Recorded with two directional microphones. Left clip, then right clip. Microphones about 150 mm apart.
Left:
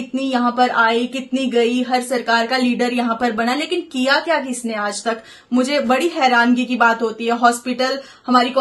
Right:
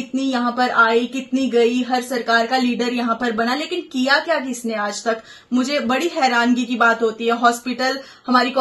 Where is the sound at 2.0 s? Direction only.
30° left (ahead or behind).